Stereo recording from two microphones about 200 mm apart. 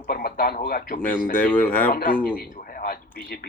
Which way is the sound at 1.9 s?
45° left (ahead or behind).